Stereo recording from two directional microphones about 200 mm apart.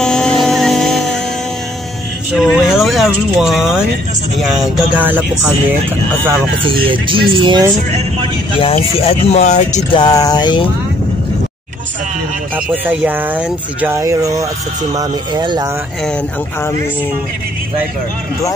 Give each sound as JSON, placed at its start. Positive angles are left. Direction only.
{"t": 0.0, "sound": "music", "side_deg": 5}
{"t": 2.3, "sound": "speech", "side_deg": 0}
{"t": 6.9, "sound": "speech", "side_deg": -25}
{"t": 8.5, "sound": "speech", "side_deg": 30}
{"t": 9.9, "sound": "a sound", "side_deg": 20}
{"t": 12.5, "sound": "speech", "side_deg": -5}